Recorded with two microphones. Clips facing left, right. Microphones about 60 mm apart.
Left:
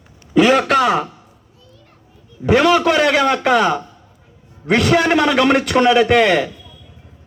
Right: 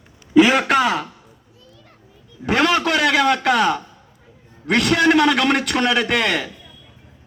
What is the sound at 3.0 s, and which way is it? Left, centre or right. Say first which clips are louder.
A man's voice: left 2 dB; centre.